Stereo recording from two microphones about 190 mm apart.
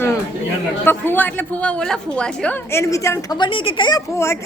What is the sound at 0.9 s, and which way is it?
A woman's voice, 10° left (ahead or behind).